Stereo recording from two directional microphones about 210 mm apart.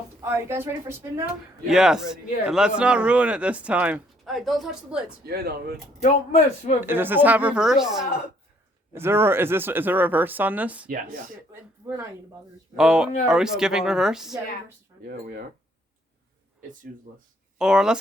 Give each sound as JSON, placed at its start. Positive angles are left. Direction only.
{"t": 0.2, "sound": "speech", "side_deg": -15}
{"t": 5.2, "sound": "speech", "side_deg": -45}
{"t": 6.0, "sound": "speech", "side_deg": 30}
{"t": 6.8, "sound": "speech", "side_deg": -10}
{"t": 10.8, "sound": "speech", "side_deg": -40}
{"t": 12.7, "sound": "speech", "side_deg": -5}
{"t": 17.6, "sound": "speech", "side_deg": -5}